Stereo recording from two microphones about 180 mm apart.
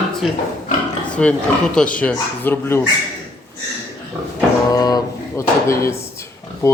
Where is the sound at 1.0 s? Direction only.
5° left (ahead or behind).